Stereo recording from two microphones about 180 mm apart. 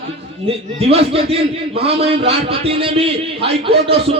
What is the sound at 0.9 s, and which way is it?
Speech, 35° right (ahead or behind).